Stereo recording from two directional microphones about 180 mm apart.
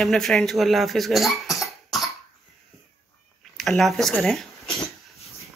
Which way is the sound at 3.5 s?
Centre (ahead or behind).